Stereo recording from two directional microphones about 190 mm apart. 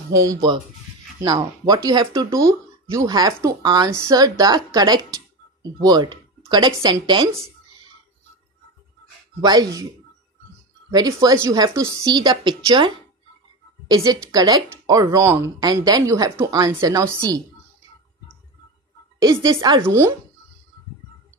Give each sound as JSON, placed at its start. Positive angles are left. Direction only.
{"t": 0.1, "sound": "speech", "side_deg": -15}
{"t": 9.4, "sound": "speech", "side_deg": -20}
{"t": 10.9, "sound": "speech", "side_deg": -20}
{"t": 19.4, "sound": "speech", "side_deg": -20}